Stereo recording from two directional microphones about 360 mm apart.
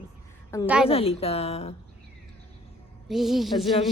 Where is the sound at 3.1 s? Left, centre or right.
Centre.